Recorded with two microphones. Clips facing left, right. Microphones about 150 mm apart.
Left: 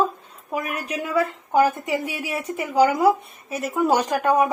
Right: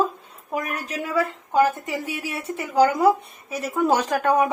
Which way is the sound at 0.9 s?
15° left (ahead or behind).